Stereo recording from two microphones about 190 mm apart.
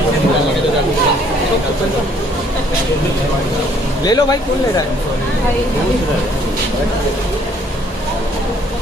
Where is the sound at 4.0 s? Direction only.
20° left (ahead or behind).